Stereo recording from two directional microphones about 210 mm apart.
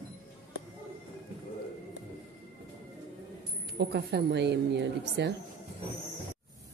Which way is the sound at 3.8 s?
55° right (ahead or behind).